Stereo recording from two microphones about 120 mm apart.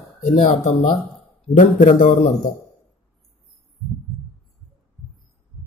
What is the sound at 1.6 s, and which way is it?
Speech, 90° left.